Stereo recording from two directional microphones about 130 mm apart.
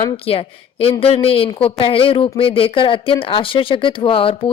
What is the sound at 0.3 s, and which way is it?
A woman's voice, 45° left (ahead or behind).